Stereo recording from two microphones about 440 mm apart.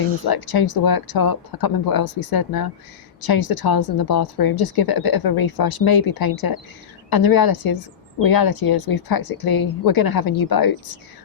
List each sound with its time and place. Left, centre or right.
0.3 s speech: left